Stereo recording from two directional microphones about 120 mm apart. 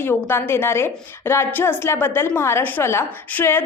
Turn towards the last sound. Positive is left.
turn(degrees=20)  # may be behind; listen again after turning